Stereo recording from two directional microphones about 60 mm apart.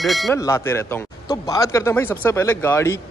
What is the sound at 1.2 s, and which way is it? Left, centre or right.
Speech, left.